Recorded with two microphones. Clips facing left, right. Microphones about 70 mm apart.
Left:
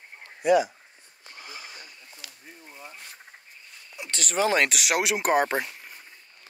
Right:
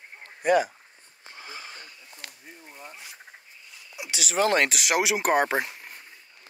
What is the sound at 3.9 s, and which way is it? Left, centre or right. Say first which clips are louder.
Speech: right 1 dB; centre.